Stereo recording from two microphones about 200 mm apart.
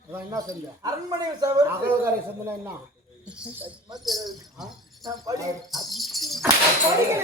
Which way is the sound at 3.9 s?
Centre (ahead or behind).